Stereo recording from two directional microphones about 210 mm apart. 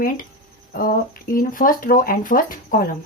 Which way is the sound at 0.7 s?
45° left (ahead or behind).